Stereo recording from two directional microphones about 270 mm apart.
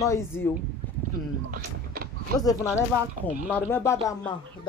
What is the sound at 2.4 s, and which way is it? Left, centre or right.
A man's voice, centre.